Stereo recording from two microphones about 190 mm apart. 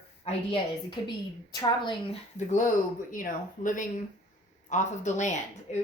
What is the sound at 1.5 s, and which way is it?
Speech, 20° left (ahead or behind).